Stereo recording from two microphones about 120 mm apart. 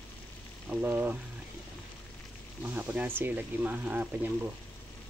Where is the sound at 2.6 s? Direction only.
15° right (ahead or behind).